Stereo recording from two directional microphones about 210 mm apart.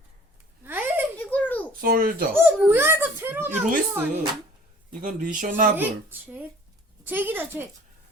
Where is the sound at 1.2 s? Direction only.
5° left (ahead or behind).